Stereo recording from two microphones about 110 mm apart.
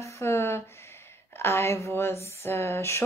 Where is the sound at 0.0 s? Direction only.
25° left (ahead or behind).